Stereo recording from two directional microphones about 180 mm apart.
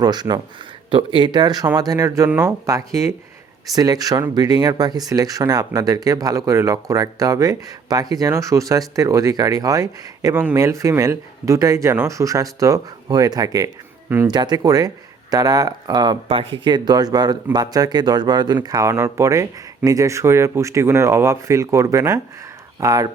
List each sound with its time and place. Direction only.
0.0 s speech: 25° right (ahead or behind)